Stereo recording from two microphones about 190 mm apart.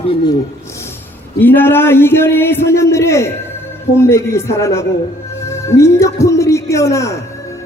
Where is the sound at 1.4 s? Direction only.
10° left (ahead or behind).